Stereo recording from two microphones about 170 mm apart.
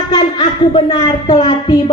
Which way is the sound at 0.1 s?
25° left (ahead or behind).